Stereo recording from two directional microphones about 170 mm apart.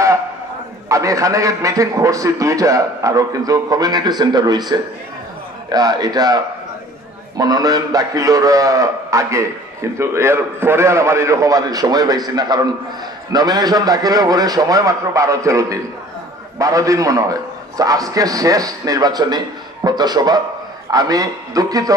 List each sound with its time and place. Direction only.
0.8 s a man's voice: 20° right (ahead or behind)